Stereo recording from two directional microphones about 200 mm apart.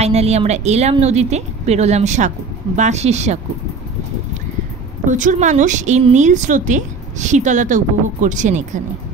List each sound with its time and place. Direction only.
0.0 s speech: 30° right (ahead or behind)
5.0 s speech: 40° right (ahead or behind)